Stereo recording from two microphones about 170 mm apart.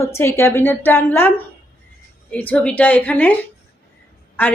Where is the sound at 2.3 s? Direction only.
10° left (ahead or behind).